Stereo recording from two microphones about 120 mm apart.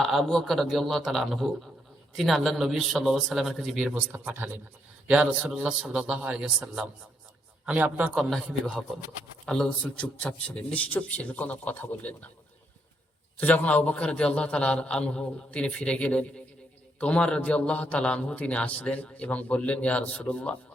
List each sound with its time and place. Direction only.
0.0 s a man's voice: centre (ahead or behind)
3.9 s a man's voice: 15° right (ahead or behind)
8.1 s a man's voice: centre (ahead or behind)
13.3 s a man's voice: 10° left (ahead or behind)